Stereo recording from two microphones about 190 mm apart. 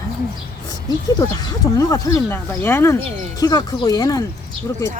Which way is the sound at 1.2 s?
20° left (ahead or behind).